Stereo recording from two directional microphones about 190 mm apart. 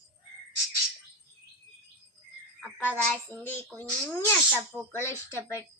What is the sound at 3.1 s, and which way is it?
Speech, 10° left (ahead or behind).